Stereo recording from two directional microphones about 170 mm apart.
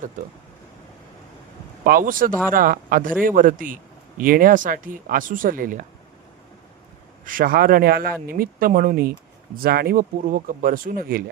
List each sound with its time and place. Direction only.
1.8 s speech: 55° right (ahead or behind)
7.3 s speech: 55° right (ahead or behind)